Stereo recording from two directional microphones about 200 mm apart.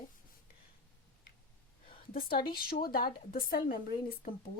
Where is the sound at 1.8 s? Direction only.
45° left (ahead or behind).